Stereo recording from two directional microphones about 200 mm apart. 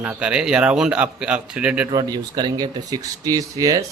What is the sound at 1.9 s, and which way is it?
A man's voice, 20° right (ahead or behind).